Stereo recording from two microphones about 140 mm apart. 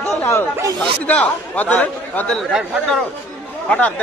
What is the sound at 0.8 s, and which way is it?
Speech, 10° left (ahead or behind).